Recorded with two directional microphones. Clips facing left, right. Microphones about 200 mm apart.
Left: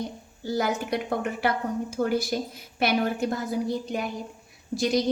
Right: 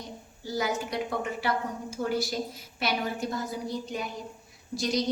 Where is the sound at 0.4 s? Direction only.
55° left (ahead or behind).